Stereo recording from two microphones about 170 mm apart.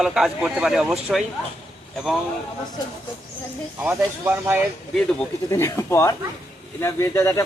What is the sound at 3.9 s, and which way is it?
Speech, 15° right (ahead or behind).